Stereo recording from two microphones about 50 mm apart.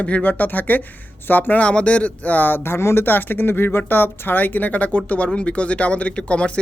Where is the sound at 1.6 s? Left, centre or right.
Left.